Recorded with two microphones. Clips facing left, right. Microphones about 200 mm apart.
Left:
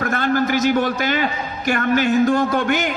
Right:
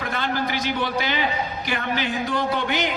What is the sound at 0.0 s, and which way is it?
A man's voice, 45° left (ahead or behind).